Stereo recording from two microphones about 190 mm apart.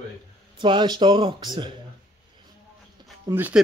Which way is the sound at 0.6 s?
25° right (ahead or behind).